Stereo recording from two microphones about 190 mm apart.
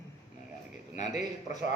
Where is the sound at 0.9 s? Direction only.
40° left (ahead or behind).